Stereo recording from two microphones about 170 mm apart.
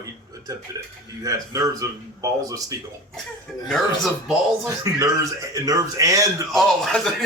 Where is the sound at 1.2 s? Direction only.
20° right (ahead or behind).